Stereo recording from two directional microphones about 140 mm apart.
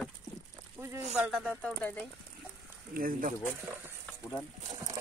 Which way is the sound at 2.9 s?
90° right.